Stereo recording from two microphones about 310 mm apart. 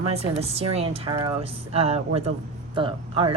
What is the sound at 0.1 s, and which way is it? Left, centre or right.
A woman's voice, centre.